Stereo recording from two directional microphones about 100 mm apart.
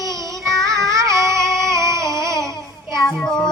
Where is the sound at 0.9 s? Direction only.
30° right (ahead or behind).